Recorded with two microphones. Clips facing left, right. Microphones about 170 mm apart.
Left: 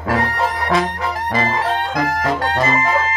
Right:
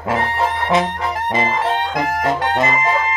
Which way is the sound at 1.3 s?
25° right (ahead or behind).